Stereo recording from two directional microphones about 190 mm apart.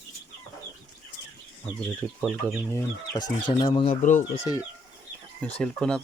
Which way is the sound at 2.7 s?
20° left (ahead or behind).